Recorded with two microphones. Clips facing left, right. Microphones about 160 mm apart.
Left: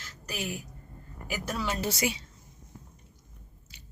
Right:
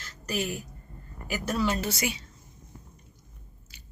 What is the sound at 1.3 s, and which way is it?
Speech, 10° left (ahead or behind).